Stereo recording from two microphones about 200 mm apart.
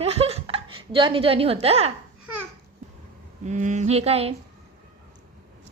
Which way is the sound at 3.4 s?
35° right (ahead or behind).